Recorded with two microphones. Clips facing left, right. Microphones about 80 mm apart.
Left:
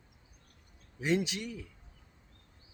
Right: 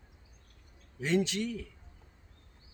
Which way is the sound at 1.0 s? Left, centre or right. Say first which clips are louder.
Right 2 dB; centre.